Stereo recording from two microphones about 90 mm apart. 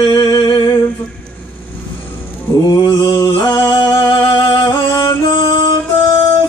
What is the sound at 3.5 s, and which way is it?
Music, 40° left (ahead or behind).